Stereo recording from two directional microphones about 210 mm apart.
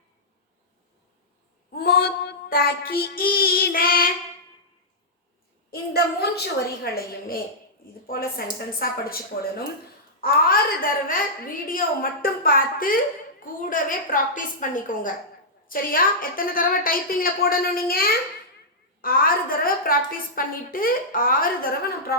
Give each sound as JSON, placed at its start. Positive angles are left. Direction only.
{"t": 1.7, "sound": "a woman's voice", "side_deg": 45}
{"t": 5.7, "sound": "a woman's voice", "side_deg": 50}
{"t": 10.2, "sound": "a woman's voice", "side_deg": 45}